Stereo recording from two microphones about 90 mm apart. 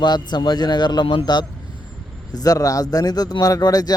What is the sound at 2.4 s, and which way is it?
Speech, 40° left (ahead or behind).